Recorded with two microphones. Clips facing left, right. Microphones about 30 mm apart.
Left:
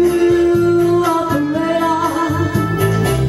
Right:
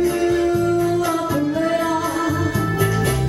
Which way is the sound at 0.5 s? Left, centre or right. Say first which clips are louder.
Left 6 dB; left.